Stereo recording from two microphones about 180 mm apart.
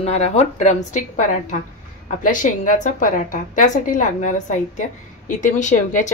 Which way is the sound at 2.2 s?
45° left (ahead or behind).